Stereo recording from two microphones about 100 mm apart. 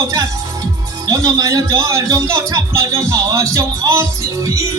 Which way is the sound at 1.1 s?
35° right (ahead or behind).